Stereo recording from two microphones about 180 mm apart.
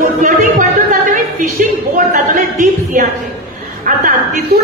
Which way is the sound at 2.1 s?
45° right (ahead or behind).